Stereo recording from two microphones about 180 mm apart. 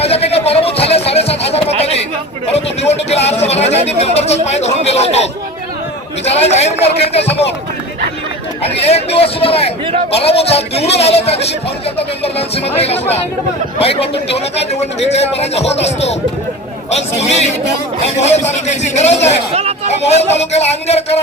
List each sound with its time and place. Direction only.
0.0 s music: 35° left (ahead or behind)
2.5 s a sound: 35° left (ahead or behind)
6.3 s speech: 40° left (ahead or behind)
8.6 s speech: 35° left (ahead or behind)
19.5 s a sound: 35° right (ahead or behind)
20.1 s speech: 35° left (ahead or behind)